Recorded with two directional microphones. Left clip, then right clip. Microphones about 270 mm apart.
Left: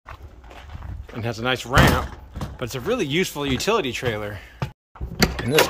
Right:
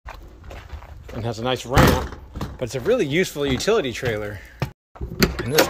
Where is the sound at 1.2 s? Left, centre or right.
Centre.